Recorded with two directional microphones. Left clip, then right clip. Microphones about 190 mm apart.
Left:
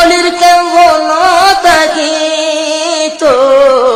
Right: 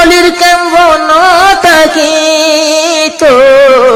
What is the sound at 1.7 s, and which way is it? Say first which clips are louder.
Carnatic music: right 3 dB; 25° right (ahead or behind).